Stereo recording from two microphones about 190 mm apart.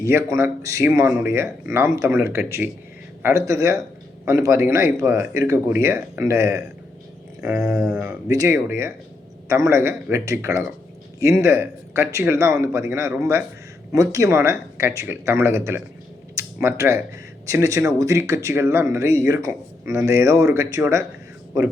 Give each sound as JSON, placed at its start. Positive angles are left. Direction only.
{"t": 0.0, "sound": "speech", "side_deg": -15}
{"t": 7.9, "sound": "speech", "side_deg": -5}
{"t": 8.3, "sound": "speech", "side_deg": -15}
{"t": 16.3, "sound": "a sound", "side_deg": -15}
{"t": 17.4, "sound": "speech", "side_deg": -15}